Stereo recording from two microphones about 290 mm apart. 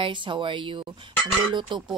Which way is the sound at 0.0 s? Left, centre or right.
Centre.